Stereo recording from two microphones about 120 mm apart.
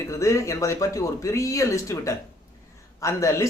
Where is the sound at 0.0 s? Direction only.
25° left (ahead or behind).